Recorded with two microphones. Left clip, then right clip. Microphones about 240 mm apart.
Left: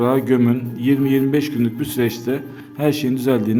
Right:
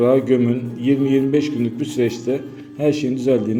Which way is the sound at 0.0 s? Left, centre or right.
Centre.